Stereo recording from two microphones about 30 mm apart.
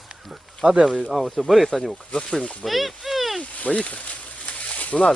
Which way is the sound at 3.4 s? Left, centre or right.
Left.